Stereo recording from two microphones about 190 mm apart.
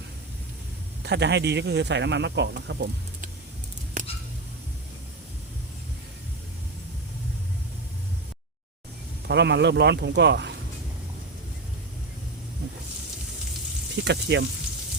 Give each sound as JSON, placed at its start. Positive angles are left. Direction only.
{"t": 1.0, "sound": "speech", "side_deg": -60}
{"t": 4.0, "sound": "a sound", "side_deg": -40}
{"t": 9.2, "sound": "speech", "side_deg": -65}
{"t": 14.0, "sound": "speech", "side_deg": -65}